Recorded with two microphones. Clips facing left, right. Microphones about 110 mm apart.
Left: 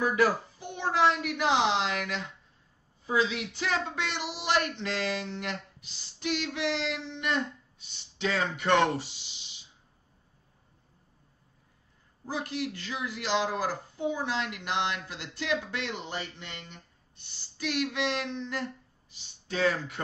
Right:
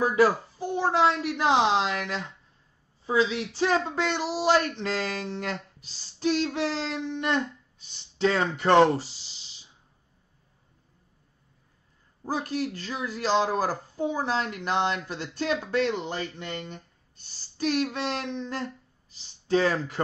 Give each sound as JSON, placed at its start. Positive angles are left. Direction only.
{"t": 0.0, "sound": "a woman's voice", "side_deg": -30}
{"t": 12.3, "sound": "speech", "side_deg": -45}